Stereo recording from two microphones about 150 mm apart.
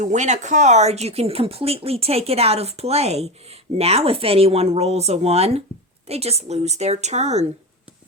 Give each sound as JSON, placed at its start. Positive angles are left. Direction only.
{"t": 0.0, "sound": "speech", "side_deg": -50}